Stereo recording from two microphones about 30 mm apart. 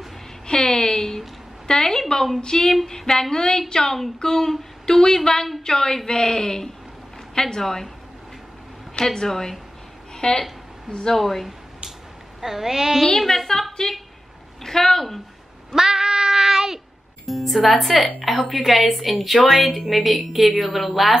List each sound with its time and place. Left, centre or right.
0.5 s a sound: left
1.7 s a woman's voice: centre
8.9 s a woman's voice: left
11.1 s a woman's voice: centre
12.4 s a woman's voice: centre
13.5 s speech: centre
15.7 s a sound: centre
17.3 s a woman's voice: centre